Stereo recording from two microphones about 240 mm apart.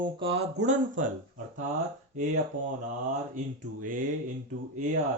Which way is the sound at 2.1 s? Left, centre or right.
Right.